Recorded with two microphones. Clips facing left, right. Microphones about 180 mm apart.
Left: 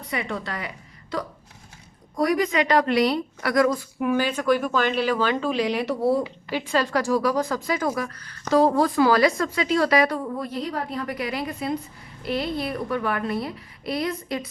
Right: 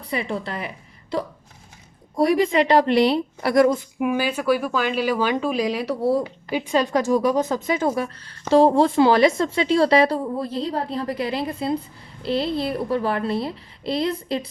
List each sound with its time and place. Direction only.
0.0 s speech: 30° right (ahead or behind)
2.1 s speech: 25° right (ahead or behind)
4.0 s a woman's voice: 10° right (ahead or behind)
6.5 s speech: 15° right (ahead or behind)